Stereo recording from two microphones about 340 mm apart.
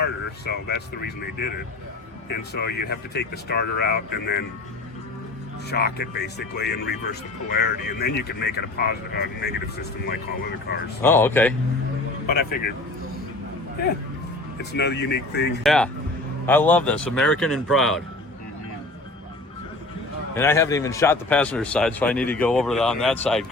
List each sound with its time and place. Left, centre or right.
0.0 s speech: left
5.7 s speech: left
11.0 s a man's voice: centre
14.6 s speech: left
15.6 s a man's voice: centre
20.3 s a man's voice: centre